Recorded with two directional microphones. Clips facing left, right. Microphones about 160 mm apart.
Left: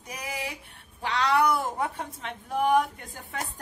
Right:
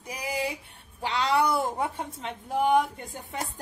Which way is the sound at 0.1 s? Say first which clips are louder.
Right 4 dB; 30° right (ahead or behind).